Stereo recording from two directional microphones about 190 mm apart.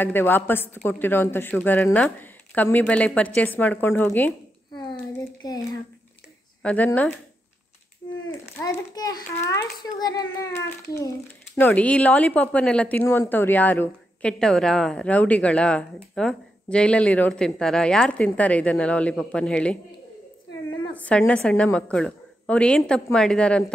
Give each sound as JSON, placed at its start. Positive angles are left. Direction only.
{"t": 0.0, "sound": "a woman's voice", "side_deg": 10}
{"t": 5.4, "sound": "a sound", "side_deg": 20}
{"t": 6.6, "sound": "a woman's voice", "side_deg": 10}
{"t": 8.5, "sound": "a child's voice", "side_deg": 15}
{"t": 11.5, "sound": "a woman's voice", "side_deg": 10}
{"t": 20.9, "sound": "a woman's voice", "side_deg": 5}